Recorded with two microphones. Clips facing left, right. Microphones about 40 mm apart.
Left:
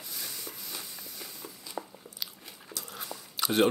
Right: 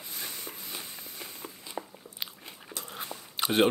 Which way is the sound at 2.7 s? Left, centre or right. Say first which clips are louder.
Right 1 dB; right.